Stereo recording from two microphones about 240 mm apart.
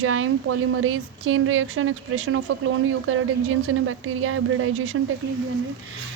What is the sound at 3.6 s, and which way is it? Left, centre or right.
Speech, right.